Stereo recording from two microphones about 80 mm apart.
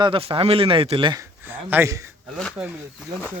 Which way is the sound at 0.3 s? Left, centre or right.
Right.